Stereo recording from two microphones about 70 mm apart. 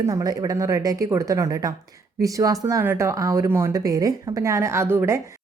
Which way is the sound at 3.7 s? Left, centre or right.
Right.